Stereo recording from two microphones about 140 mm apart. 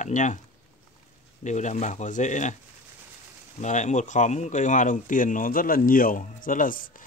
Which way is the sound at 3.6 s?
60° left (ahead or behind).